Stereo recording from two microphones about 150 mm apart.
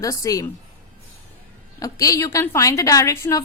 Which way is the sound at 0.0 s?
20° left (ahead or behind).